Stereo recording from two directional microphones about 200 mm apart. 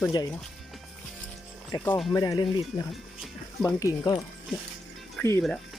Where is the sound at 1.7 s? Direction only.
10° left (ahead or behind).